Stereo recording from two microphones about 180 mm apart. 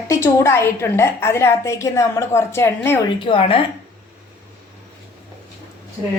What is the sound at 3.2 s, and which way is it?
Speech, 30° left (ahead or behind).